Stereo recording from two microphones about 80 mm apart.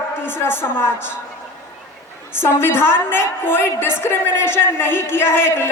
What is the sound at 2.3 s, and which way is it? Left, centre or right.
A woman's voice, left.